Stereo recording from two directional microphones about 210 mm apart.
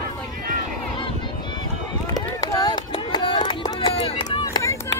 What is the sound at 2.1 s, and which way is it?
Run, 20° left (ahead or behind).